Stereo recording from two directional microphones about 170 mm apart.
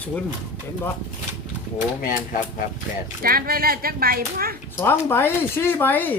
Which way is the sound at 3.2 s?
60° right (ahead or behind).